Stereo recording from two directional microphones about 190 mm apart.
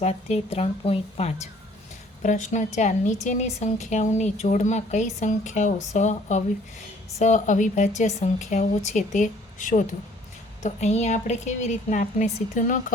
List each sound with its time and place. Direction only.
0.0 s a woman's voice: 35° left (ahead or behind)